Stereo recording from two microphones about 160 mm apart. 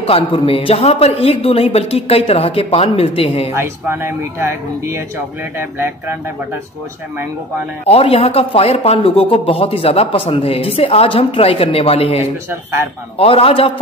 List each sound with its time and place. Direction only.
0.0 s a man's voice: 35° left (ahead or behind)
3.5 s speech: 15° right (ahead or behind)
7.8 s a man's voice: 40° left (ahead or behind)